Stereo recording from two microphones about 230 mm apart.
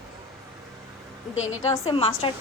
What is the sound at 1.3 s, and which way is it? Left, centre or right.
Speech, left.